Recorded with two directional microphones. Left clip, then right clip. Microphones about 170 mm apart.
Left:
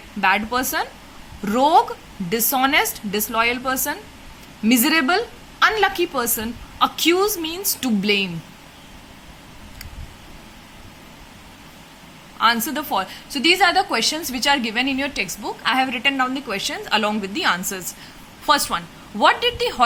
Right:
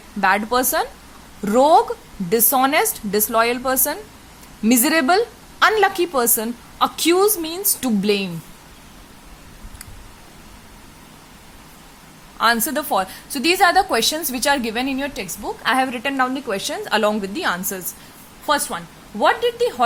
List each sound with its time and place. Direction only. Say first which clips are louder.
0.2 s a woman's voice: right 2 dB; 40° right (ahead or behind)
12.4 s a woman's voice: right 1 dB; 40° right (ahead or behind)
18.4 s a woman's voice: left 2 dB; 20° right (ahead or behind)